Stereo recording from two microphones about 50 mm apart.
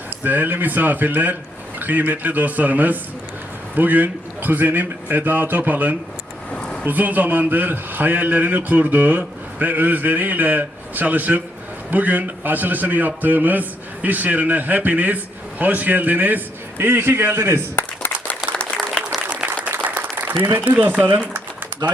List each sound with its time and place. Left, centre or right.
0.1 s a man's voice: right
6.5 s a sound: centre
6.8 s a man's voice: right
16.7 s a man's voice: right
17.7 s a sound: left
18.5 s applause: centre
19.4 s applause: centre
20.7 s a man's voice: right